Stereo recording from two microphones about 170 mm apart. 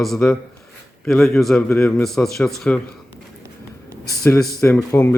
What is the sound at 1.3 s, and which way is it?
Speech, centre (ahead or behind).